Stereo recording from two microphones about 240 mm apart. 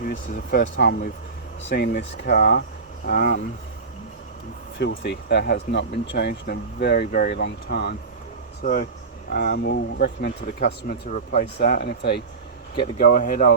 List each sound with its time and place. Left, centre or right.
0.0 s speech: left
4.8 s speech: left
12.7 s speech: left
13.1 s speech: left